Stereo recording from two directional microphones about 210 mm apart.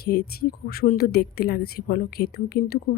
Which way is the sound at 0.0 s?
50° left (ahead or behind).